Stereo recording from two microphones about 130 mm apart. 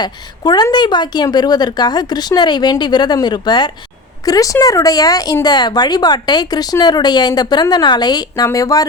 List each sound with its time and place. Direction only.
0.0 s speech: 30° left (ahead or behind)